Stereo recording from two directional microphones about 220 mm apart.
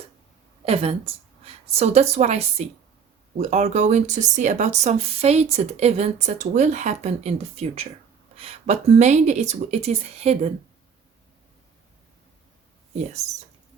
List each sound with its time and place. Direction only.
0.6 s a woman's voice: 25° right (ahead or behind)